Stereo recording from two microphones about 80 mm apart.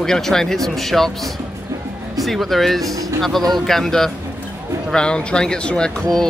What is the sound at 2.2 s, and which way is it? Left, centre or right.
Speech, centre.